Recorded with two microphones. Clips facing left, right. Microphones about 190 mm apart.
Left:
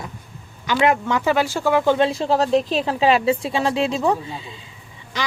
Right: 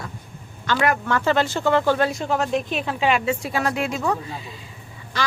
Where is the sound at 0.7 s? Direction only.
20° left (ahead or behind).